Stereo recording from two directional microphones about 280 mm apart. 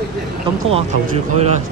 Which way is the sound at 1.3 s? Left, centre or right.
Right.